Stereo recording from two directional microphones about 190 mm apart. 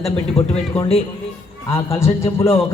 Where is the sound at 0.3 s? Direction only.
30° left (ahead or behind).